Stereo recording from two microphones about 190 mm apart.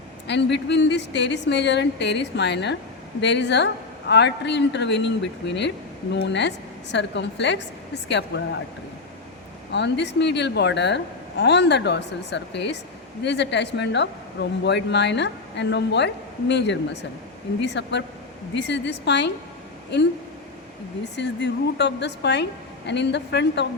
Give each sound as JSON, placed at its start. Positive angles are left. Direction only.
{"t": 0.3, "sound": "a woman's voice", "side_deg": 65}
{"t": 9.7, "sound": "a woman's voice", "side_deg": 65}